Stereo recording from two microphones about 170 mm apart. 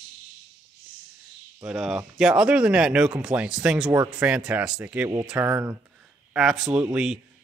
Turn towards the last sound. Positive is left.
turn(degrees=-5)  # may be behind; listen again after turning